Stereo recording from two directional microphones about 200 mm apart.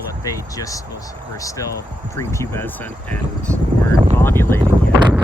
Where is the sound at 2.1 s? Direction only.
15° left (ahead or behind).